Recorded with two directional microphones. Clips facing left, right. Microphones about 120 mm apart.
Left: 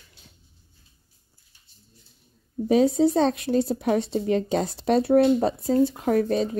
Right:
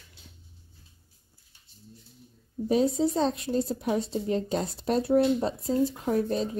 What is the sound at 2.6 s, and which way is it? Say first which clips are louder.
Speech: left 5 dB; 80° left.